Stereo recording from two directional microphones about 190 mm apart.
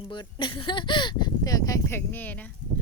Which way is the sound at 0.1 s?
25° left (ahead or behind).